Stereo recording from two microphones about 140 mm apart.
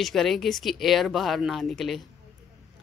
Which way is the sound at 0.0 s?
Centre (ahead or behind).